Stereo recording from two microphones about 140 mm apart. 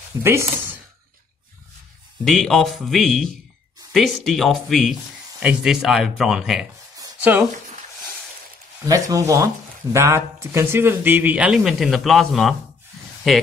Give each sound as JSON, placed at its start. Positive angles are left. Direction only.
{"t": 0.2, "sound": "speech", "side_deg": -20}
{"t": 2.2, "sound": "speech", "side_deg": 0}
{"t": 8.8, "sound": "a man's voice", "side_deg": -25}